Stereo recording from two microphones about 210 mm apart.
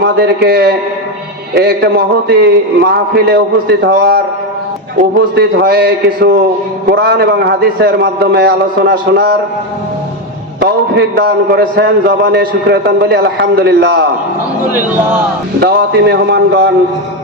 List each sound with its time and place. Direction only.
0.0 s a man's voice: 50° right (ahead or behind)
5.3 s a man's voice: 50° right (ahead or behind)
10.6 s a man's voice: 50° right (ahead or behind)
15.6 s a man's voice: 50° right (ahead or behind)